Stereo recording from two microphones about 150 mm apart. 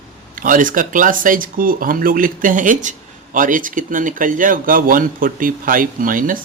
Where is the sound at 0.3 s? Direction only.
65° right (ahead or behind).